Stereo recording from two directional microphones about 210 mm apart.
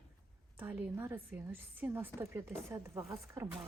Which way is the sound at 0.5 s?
10° right (ahead or behind).